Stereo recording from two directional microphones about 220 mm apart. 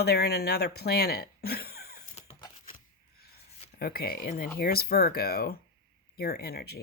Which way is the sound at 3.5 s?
40° left (ahead or behind).